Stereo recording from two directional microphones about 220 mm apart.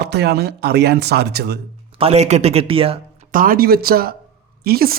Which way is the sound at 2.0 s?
30° right (ahead or behind).